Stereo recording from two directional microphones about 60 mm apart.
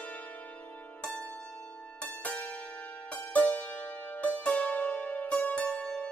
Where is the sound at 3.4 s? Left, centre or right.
Left.